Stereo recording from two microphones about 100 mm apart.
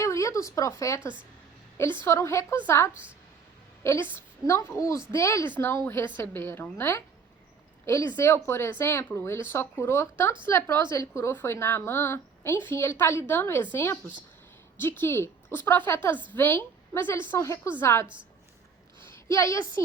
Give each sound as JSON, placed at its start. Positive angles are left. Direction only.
{"t": 0.0, "sound": "speech", "side_deg": 30}
{"t": 2.0, "sound": "a woman's voice", "side_deg": 30}
{"t": 2.9, "sound": "a woman's voice", "side_deg": -15}
{"t": 3.8, "sound": "a woman's voice", "side_deg": 20}
{"t": 19.3, "sound": "a woman's voice", "side_deg": 30}